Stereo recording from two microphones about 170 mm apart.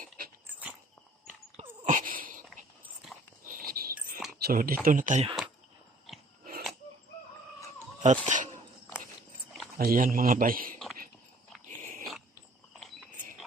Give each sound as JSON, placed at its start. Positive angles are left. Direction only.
{"t": 0.4, "sound": "dog", "side_deg": -10}
{"t": 1.9, "sound": "a sound", "side_deg": -55}
{"t": 3.4, "sound": "a sound", "side_deg": -55}
{"t": 4.3, "sound": "speech", "side_deg": -60}
{"t": 6.1, "sound": "scissors", "side_deg": 0}
{"t": 6.4, "sound": "a sound", "side_deg": -60}
{"t": 8.0, "sound": "dog", "side_deg": -45}
{"t": 9.7, "sound": "a man's voice", "side_deg": -55}
{"t": 11.8, "sound": "biting", "side_deg": -50}